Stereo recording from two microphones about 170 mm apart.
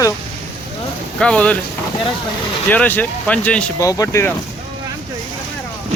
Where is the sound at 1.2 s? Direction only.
5° left (ahead or behind).